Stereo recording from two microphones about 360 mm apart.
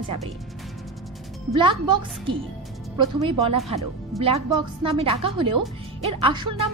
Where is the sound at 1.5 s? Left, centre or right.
Centre.